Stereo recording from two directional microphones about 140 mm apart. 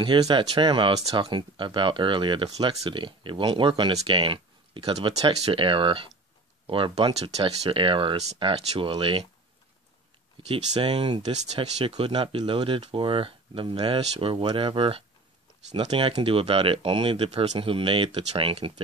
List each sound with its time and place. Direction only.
0.0 s speech: 35° right (ahead or behind)
10.5 s speech: 40° right (ahead or behind)
11.3 s speech: 50° right (ahead or behind)